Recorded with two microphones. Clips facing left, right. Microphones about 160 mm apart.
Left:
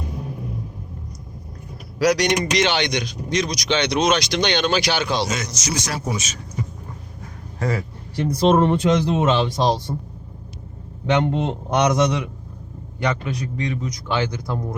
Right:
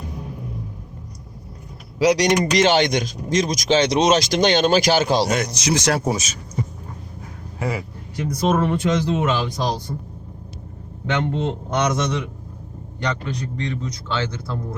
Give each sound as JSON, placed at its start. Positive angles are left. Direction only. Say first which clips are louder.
{"t": 2.0, "sound": "speech", "louder": "right 2 dB", "side_deg": -35}
{"t": 5.7, "sound": "speech", "louder": "right 8 dB", "side_deg": -80}
{"t": 6.1, "sound": "speech", "louder": "right 4 dB", "side_deg": -40}
{"t": 7.6, "sound": "speech", "louder": "left 1 dB", "side_deg": -10}
{"t": 8.1, "sound": "speech", "louder": "left 3 dB", "side_deg": 30}
{"t": 11.0, "sound": "a man's voice", "louder": "left 3 dB", "side_deg": 20}